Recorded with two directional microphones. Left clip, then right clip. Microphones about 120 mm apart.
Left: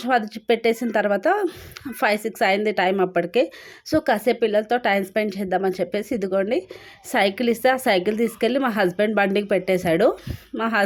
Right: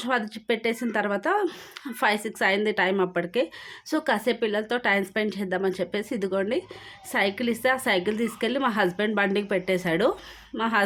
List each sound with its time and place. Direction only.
0.0 s a woman's voice: 25° left (ahead or behind)
7.1 s a woman's voice: 40° left (ahead or behind)